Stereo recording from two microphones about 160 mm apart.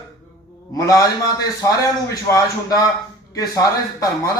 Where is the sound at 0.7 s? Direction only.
20° left (ahead or behind).